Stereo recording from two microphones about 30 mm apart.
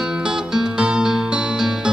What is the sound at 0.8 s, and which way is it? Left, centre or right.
Music, right.